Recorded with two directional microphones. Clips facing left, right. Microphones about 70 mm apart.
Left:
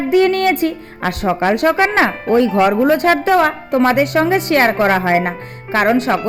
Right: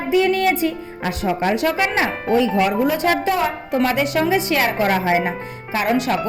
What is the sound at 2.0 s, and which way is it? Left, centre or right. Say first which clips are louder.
Speech: left 5 dB; left.